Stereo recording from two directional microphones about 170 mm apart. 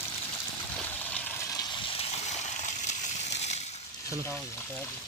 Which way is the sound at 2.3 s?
45° left (ahead or behind).